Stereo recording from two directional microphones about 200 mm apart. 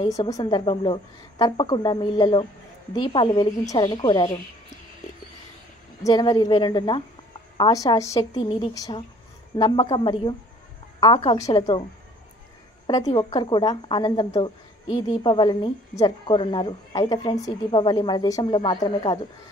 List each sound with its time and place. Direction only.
0.0 s a woman's voice: 20° left (ahead or behind)
6.0 s a woman's voice: 20° left (ahead or behind)
12.8 s a woman's voice: 20° left (ahead or behind)